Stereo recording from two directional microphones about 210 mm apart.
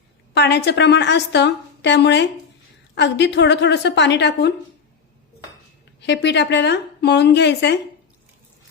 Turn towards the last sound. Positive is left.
turn(degrees=55)  # may be behind; listen again after turning